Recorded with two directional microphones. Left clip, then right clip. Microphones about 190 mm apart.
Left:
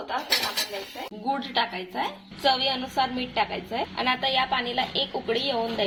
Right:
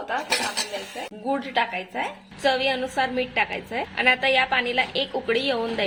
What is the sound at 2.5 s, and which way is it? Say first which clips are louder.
A woman's voice: right 2 dB; 20° right (ahead or behind).